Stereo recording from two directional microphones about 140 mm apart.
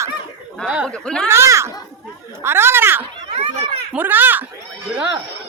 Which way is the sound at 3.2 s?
45° right (ahead or behind).